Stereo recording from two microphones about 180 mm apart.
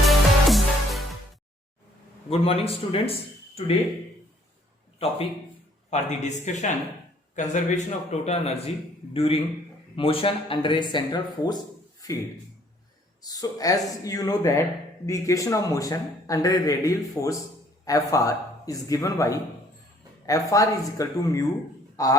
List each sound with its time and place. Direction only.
0.0 s music: centre (ahead or behind)
2.3 s speech: 30° left (ahead or behind)
5.9 s a man's voice: 40° left (ahead or behind)
13.2 s a man's voice: 20° left (ahead or behind)